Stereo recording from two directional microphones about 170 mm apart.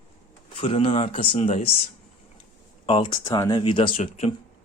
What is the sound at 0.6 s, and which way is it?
Speech, 35° left (ahead or behind).